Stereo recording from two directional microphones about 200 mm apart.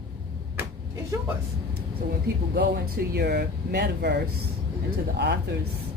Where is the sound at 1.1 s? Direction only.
15° right (ahead or behind).